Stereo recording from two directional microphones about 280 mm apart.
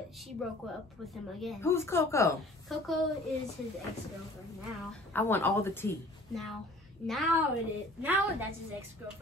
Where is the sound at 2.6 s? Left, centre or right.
Centre.